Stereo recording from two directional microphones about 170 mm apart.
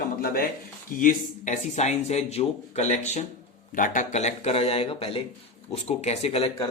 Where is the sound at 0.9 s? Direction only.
55° left (ahead or behind).